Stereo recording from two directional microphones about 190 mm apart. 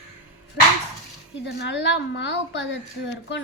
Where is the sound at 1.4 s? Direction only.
65° left (ahead or behind).